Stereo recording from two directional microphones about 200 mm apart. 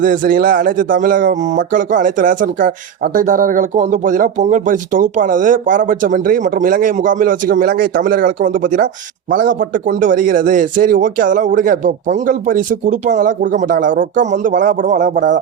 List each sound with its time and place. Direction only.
0.0 s speech: 45° right (ahead or behind)